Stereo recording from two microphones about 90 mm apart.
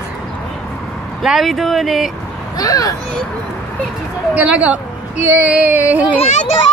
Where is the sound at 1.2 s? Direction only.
Centre (ahead or behind).